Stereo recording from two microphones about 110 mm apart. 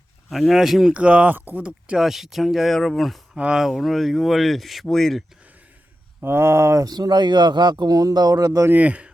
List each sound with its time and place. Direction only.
0.3 s speech: centre (ahead or behind)
0.9 s speech: 10° right (ahead or behind)
3.3 s speech: 10° right (ahead or behind)
6.2 s speech: 20° right (ahead or behind)
8.7 s speech: 10° right (ahead or behind)